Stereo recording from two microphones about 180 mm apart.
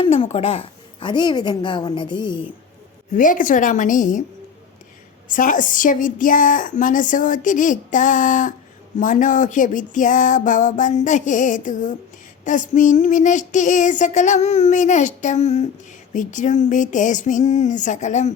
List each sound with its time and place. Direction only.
0.0 s a woman's voice: 35° left (ahead or behind)
3.1 s speech: 45° left (ahead or behind)
5.3 s speech: 50° left (ahead or behind)